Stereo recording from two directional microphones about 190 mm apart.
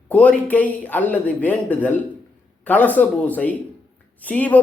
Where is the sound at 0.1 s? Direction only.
10° left (ahead or behind).